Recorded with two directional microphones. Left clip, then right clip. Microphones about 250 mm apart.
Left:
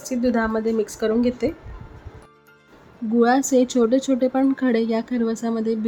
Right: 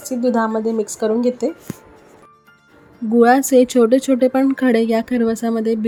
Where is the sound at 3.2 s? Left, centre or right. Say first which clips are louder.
Right 6 dB; centre.